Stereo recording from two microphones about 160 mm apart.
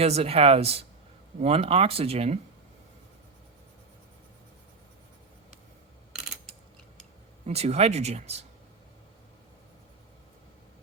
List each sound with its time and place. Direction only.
0.0 s speech: 40° right (ahead or behind)
7.4 s speech: 40° right (ahead or behind)